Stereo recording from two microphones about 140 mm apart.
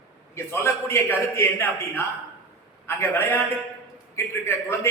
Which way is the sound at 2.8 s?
15° left (ahead or behind).